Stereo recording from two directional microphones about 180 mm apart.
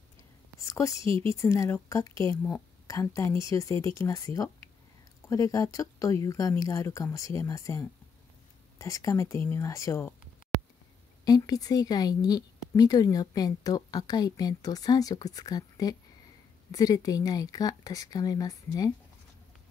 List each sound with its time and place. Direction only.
0.6 s whispering: 15° left (ahead or behind)
1.1 s speech: 15° left (ahead or behind)
11.2 s a woman's voice: 20° left (ahead or behind)